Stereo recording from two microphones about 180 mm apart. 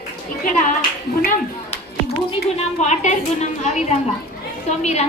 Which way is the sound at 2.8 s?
40° left (ahead or behind).